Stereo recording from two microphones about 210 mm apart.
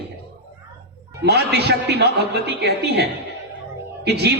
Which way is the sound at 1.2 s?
50° right (ahead or behind).